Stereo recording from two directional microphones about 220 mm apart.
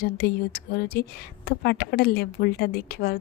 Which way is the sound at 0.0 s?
40° left (ahead or behind).